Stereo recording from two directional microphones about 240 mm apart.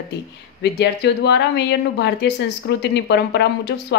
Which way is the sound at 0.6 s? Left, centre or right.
Left.